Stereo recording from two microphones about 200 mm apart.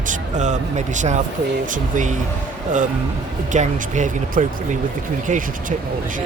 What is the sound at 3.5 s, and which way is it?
Speech, 35° right (ahead or behind).